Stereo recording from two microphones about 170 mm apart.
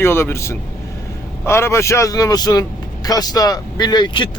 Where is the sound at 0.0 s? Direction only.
15° left (ahead or behind).